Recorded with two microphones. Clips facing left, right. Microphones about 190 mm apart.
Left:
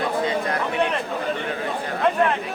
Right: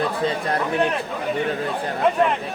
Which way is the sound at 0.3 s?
30° right (ahead or behind).